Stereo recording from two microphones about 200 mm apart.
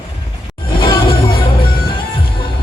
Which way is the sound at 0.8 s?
25° left (ahead or behind).